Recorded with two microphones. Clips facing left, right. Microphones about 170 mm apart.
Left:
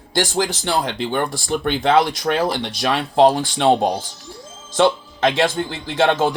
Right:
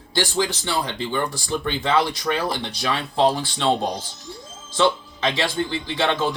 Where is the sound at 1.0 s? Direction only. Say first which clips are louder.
Left 3 dB; 65° left (ahead or behind); by 6.3 s 50° left (ahead or behind).